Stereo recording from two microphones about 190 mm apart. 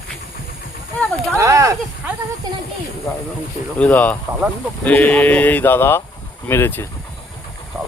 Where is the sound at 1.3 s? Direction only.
15° right (ahead or behind).